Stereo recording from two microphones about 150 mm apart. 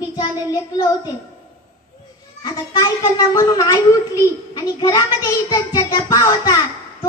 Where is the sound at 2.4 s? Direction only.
25° left (ahead or behind).